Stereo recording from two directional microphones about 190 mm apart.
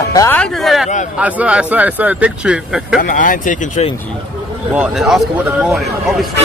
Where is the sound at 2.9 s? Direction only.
45° left (ahead or behind).